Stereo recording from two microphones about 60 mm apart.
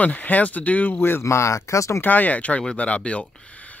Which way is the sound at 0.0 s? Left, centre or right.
Left.